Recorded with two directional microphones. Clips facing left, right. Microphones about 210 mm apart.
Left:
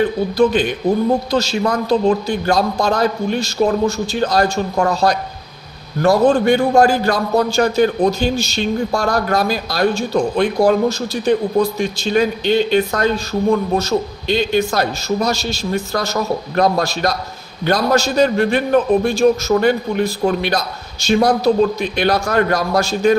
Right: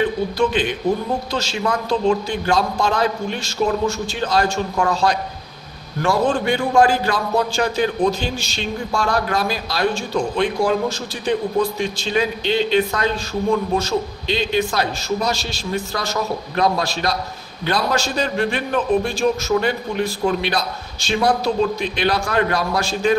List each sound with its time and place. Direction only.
0.4 s a man's voice: 40° left (ahead or behind)